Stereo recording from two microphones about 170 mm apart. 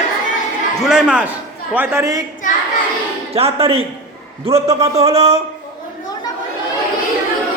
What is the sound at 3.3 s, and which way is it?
Speech, 35° right (ahead or behind).